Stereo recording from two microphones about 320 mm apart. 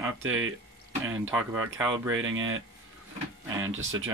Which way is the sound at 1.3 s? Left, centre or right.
Centre.